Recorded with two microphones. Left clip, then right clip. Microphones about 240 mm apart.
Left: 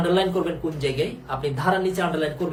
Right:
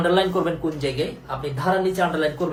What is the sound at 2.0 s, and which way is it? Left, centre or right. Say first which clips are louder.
Speech: right 3 dB; centre.